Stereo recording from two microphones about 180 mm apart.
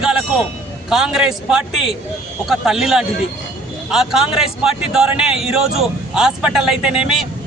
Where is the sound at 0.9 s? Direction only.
Centre (ahead or behind).